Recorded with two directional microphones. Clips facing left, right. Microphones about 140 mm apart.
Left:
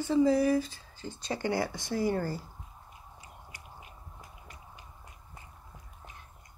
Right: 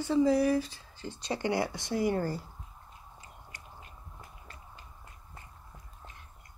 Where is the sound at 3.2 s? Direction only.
10° left (ahead or behind).